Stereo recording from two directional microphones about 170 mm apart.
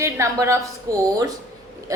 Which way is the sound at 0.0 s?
15° right (ahead or behind).